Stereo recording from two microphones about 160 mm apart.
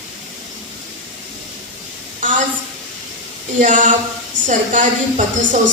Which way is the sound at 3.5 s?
55° right (ahead or behind).